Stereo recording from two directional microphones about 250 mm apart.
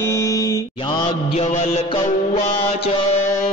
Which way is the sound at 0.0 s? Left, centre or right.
Centre.